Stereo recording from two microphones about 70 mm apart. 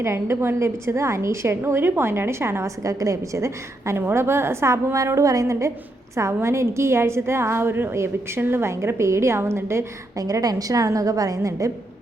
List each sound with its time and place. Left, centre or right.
0.0 s a woman's voice: right
10.2 s a woman's voice: right